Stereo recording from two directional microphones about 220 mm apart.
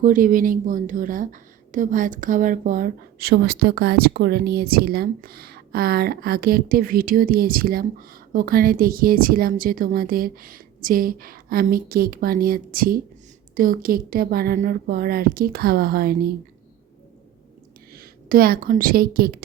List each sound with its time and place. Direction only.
0.0 s a woman's voice: 35° right (ahead or behind)
17.9 s a woman's voice: 40° right (ahead or behind)